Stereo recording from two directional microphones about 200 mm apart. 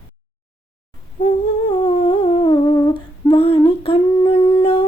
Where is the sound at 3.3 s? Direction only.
30° left (ahead or behind).